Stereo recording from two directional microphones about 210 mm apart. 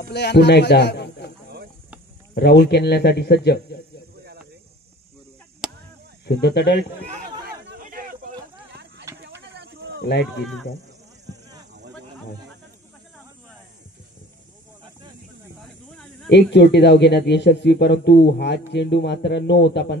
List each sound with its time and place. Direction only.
0.1 s a man's voice: 55° left (ahead or behind)
2.3 s speech: 50° left (ahead or behind)
6.2 s speech: 50° left (ahead or behind)
7.4 s a sound: 45° right (ahead or behind)
9.2 s a sound: 55° right (ahead or behind)
10.2 s speech: centre (ahead or behind)
16.3 s speech: 55° left (ahead or behind)